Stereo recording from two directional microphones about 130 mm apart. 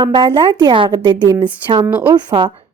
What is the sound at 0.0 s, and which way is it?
A woman's voice, 40° right (ahead or behind).